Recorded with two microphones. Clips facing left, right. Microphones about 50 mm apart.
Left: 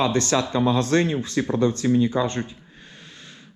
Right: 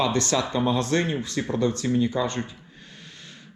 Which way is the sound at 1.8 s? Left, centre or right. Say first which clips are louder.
Left 5 dB; left.